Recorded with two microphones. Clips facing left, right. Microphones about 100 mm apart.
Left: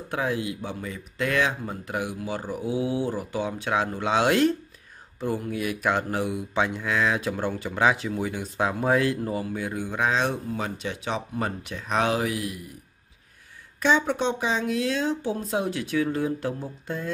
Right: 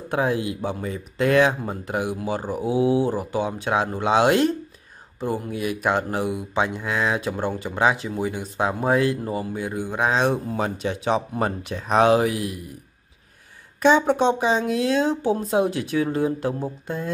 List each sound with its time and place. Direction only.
0.1 s speech: 30° right (ahead or behind)
6.3 s speech: 5° right (ahead or behind)
6.8 s speech: 15° right (ahead or behind)
13.8 s speech: 35° right (ahead or behind)